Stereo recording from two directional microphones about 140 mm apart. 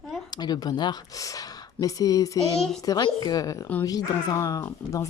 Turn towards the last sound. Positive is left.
turn(degrees=25)  # may be behind; listen again after turning